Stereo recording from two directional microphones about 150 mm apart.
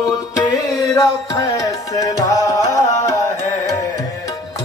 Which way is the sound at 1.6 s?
25° left (ahead or behind).